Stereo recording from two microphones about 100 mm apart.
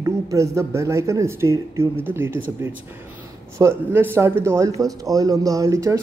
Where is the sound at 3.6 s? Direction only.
25° right (ahead or behind).